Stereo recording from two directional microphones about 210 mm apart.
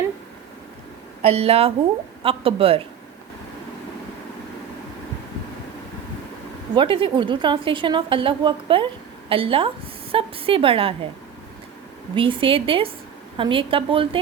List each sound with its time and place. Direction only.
1.2 s a woman's voice: 30° right (ahead or behind)
6.7 s a woman's voice: 25° right (ahead or behind)
12.1 s a woman's voice: 25° right (ahead or behind)